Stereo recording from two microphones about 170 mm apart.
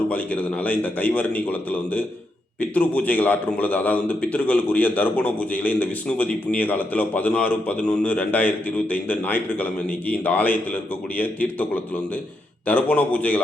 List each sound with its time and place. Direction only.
0.1 s a man's voice: 10° left (ahead or behind)